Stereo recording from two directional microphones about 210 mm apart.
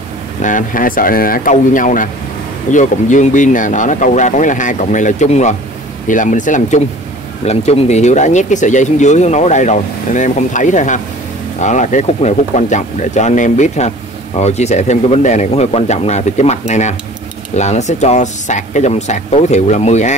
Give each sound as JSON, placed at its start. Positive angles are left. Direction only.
{"t": 0.4, "sound": "speech", "side_deg": 40}